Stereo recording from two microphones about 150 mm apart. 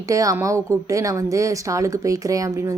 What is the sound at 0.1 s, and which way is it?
Speech, 20° right (ahead or behind).